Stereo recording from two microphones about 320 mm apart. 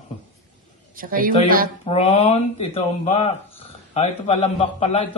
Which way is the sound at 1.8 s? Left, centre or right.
Centre.